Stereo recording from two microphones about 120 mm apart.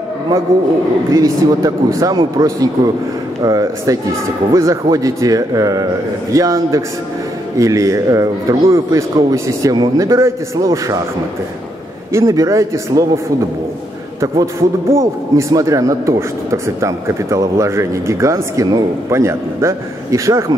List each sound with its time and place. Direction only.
1.1 s a man's voice: 30° right (ahead or behind)
12.1 s a man's voice: 25° right (ahead or behind)
14.4 s a man's voice: 25° right (ahead or behind)